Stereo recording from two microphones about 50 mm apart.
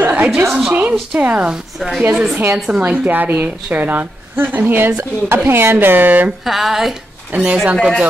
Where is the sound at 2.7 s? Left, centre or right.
Right.